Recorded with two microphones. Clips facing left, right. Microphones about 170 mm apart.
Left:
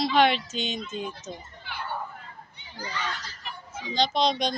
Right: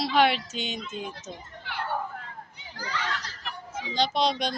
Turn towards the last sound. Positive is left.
turn(degrees=-10)  # may be behind; listen again after turning